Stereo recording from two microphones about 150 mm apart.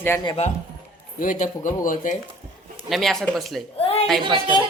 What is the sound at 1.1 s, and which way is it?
A man's voice, 60° left (ahead or behind).